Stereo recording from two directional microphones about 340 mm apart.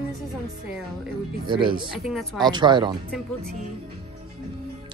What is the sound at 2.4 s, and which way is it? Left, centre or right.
Speech, centre.